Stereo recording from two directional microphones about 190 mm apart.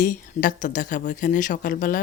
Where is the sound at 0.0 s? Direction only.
45° left (ahead or behind).